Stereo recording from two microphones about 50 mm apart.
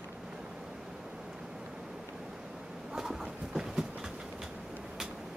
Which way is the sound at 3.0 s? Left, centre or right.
Centre.